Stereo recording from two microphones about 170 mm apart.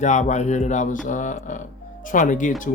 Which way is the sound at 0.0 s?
45° left (ahead or behind).